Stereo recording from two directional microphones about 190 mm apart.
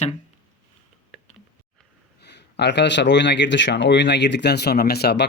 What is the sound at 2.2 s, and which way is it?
Speech, 65° left (ahead or behind).